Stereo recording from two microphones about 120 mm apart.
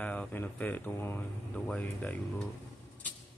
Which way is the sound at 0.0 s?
10° left (ahead or behind).